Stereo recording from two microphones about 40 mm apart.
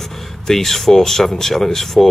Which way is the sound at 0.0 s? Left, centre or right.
Centre.